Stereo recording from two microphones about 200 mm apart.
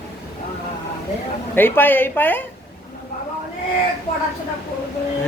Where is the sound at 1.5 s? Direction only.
10° left (ahead or behind).